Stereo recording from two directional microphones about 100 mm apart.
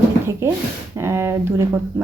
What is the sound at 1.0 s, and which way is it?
Speech, 25° right (ahead or behind).